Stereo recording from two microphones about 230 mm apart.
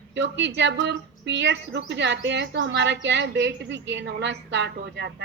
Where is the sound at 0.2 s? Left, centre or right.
Right.